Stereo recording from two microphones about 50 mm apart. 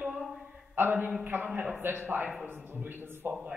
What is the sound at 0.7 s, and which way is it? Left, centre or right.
A woman's voice, right.